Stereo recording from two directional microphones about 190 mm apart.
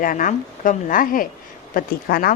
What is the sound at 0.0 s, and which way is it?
Speech, 45° left (ahead or behind).